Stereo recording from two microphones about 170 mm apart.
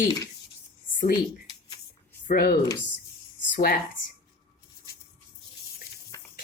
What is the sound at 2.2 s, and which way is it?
Speech, 60° left (ahead or behind).